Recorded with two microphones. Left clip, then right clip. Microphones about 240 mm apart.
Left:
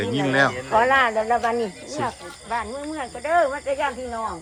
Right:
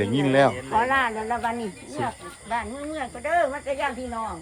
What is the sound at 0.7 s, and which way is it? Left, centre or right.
Speech, left.